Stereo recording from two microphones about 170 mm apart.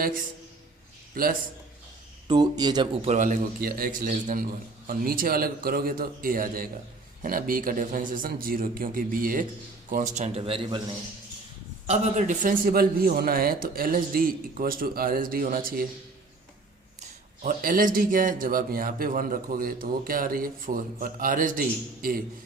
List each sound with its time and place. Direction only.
1.1 s a man's voice: 55° right (ahead or behind)
2.2 s speech: 25° right (ahead or behind)
3.2 s a man's voice: 55° right (ahead or behind); by 10.8 s 30° right (ahead or behind)
11.9 s speech: 45° right (ahead or behind)
17.0 s speech: 50° right (ahead or behind)